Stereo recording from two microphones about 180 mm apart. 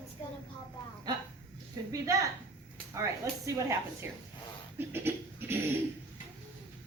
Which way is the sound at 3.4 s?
15° right (ahead or behind).